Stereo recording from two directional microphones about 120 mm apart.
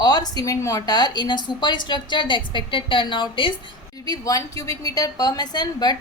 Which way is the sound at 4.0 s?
30° left (ahead or behind).